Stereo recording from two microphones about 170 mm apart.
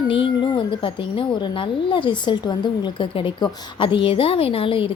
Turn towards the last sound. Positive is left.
turn(degrees=30)  # may be behind; listen again after turning